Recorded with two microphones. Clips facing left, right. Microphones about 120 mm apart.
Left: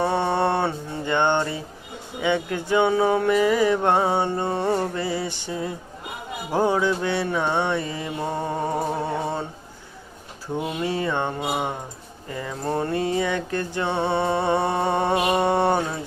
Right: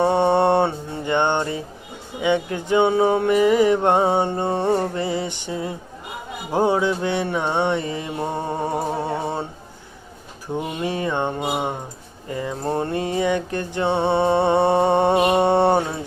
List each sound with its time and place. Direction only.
0.0 s music: 20° right (ahead or behind)
10.5 s mantra: 20° right (ahead or behind)
12.3 s music: 25° right (ahead or behind)